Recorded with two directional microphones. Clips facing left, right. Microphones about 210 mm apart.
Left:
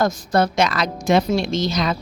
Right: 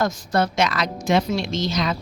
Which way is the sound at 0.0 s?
40° left (ahead or behind).